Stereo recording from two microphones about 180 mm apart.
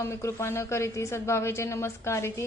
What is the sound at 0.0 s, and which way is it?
A woman's voice, 15° left (ahead or behind).